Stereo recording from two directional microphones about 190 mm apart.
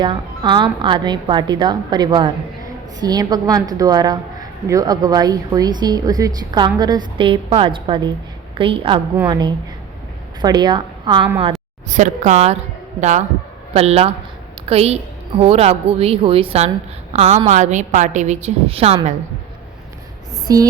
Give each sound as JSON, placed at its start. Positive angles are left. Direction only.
{"t": 0.0, "sound": "a woman's voice", "side_deg": -25}
{"t": 11.9, "sound": "a woman's voice", "side_deg": -40}
{"t": 20.5, "sound": "a sound", "side_deg": -20}